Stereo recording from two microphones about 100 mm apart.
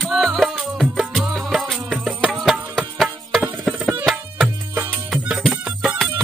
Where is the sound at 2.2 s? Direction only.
Centre (ahead or behind).